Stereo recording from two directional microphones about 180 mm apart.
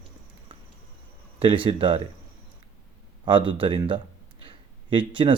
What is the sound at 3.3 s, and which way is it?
Speech, 30° right (ahead or behind).